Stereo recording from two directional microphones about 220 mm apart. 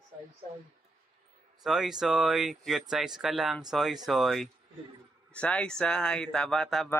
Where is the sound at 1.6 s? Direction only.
Centre (ahead or behind).